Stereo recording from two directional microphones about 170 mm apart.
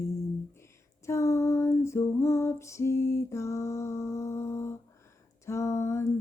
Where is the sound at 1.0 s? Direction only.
15° left (ahead or behind).